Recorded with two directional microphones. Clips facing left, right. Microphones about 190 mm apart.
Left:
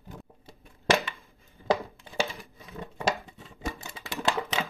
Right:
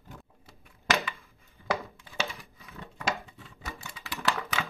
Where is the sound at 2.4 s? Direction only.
35° left (ahead or behind).